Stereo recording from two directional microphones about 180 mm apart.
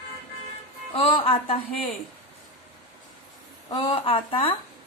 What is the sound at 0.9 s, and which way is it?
Speech, 30° left (ahead or behind).